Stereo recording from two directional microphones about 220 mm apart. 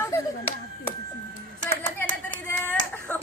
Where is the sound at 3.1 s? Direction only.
5° left (ahead or behind).